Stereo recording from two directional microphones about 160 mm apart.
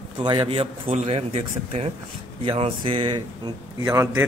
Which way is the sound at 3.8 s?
15° right (ahead or behind).